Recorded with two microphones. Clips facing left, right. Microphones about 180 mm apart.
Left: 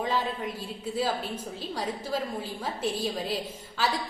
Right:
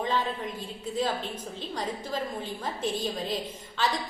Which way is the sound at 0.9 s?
5° left (ahead or behind).